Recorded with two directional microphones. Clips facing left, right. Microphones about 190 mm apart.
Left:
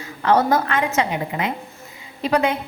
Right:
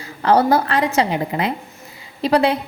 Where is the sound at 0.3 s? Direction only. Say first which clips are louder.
Right 2 dB; 35° right (ahead or behind).